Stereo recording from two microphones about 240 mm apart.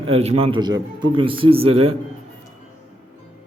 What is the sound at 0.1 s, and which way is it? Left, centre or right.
Speech, right.